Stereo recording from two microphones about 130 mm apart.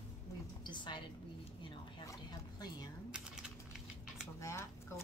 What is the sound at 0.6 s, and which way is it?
Speech, 35° left (ahead or behind).